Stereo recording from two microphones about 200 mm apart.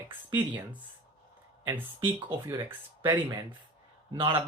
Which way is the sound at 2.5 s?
10° right (ahead or behind).